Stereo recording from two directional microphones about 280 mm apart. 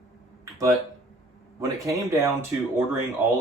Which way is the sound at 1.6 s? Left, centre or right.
Centre.